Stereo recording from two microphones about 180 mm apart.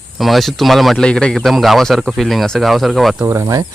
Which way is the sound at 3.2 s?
15° right (ahead or behind).